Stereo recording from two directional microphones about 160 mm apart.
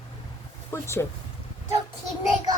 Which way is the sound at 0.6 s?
15° left (ahead or behind).